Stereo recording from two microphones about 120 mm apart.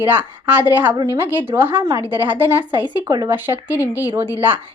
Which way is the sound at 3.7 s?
25° left (ahead or behind).